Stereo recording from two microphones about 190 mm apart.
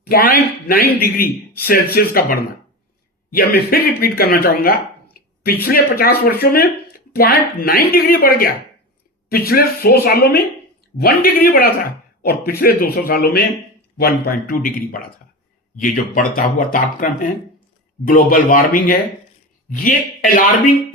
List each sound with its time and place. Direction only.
0.0 s speech: 55° left (ahead or behind)
5.2 s a sound: 50° left (ahead or behind)
5.6 s speech: 55° left (ahead or behind)